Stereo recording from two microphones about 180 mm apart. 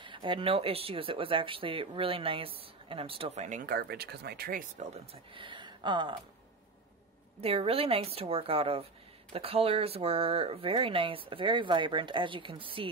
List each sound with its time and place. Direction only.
0.0 s speech: 25° right (ahead or behind); by 4.8 s 50° right (ahead or behind)
5.1 s speech: 30° right (ahead or behind)
7.3 s speech: 30° right (ahead or behind)